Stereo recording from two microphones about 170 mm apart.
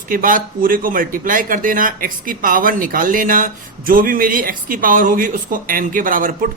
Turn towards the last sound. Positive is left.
turn(degrees=-55)  # may be behind; listen again after turning